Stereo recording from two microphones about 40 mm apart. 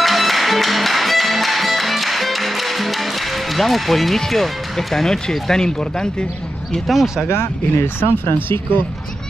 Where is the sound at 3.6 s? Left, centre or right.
Centre.